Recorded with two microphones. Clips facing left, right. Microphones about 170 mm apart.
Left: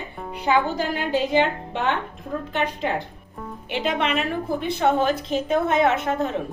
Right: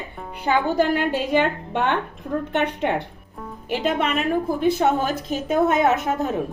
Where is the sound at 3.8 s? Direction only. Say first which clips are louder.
Right 1 dB; 45° right (ahead or behind).